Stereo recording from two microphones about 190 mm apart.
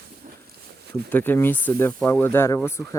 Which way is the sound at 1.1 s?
10° left (ahead or behind).